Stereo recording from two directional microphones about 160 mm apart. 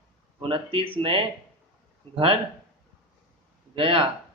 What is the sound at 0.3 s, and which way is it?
Speech, 30° right (ahead or behind).